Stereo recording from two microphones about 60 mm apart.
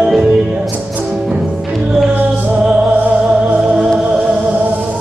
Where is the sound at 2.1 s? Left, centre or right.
Right.